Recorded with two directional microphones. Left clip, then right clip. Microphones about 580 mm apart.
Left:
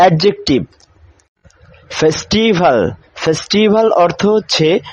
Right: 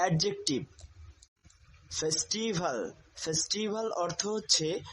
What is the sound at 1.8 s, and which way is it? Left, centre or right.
Speech, centre.